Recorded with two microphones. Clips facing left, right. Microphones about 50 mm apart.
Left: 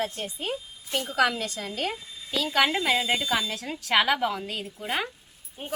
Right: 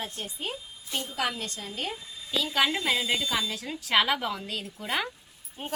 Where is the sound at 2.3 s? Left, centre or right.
Left.